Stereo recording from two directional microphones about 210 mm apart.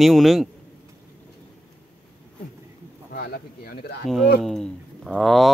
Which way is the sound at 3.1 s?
45° left (ahead or behind).